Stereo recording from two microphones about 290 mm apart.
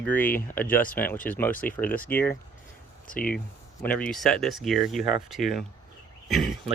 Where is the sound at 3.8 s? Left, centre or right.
Centre.